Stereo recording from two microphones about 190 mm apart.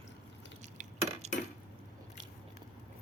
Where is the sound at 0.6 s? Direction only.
40° right (ahead or behind).